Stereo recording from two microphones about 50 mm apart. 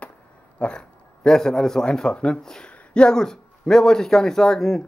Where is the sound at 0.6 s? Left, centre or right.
Centre.